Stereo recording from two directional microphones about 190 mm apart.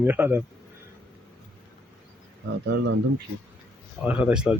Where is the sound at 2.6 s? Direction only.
65° right (ahead or behind).